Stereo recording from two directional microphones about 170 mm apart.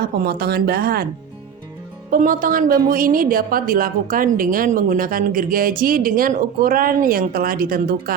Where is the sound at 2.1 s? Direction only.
55° right (ahead or behind).